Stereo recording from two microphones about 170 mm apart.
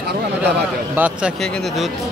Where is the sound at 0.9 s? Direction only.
10° right (ahead or behind).